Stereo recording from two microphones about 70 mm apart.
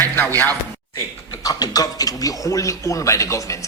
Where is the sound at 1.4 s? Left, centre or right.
Left.